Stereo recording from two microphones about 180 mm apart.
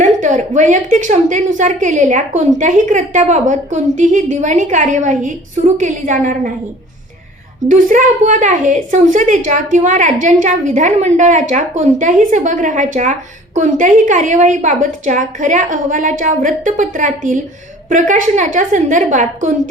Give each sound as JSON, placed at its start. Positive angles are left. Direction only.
{"t": 0.0, "sound": "a woman's voice", "side_deg": -45}
{"t": 7.7, "sound": "a woman's voice", "side_deg": -45}